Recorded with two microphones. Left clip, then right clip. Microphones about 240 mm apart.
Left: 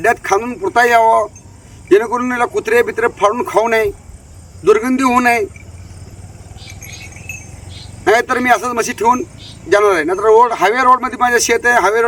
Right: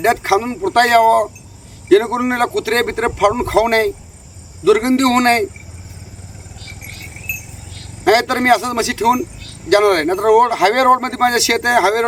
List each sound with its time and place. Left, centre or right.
0.0 s speech: centre
8.0 s speech: centre